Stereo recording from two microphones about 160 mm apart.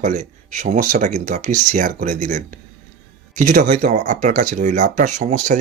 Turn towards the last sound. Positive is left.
turn(degrees=-50)  # may be behind; listen again after turning